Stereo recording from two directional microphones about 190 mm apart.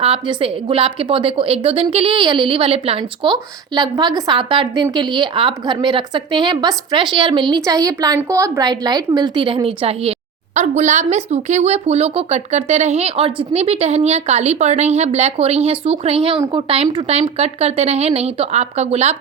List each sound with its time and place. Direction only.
0.0 s a woman's voice: 30° right (ahead or behind)